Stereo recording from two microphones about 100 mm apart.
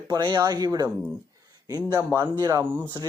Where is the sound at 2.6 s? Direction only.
20° right (ahead or behind).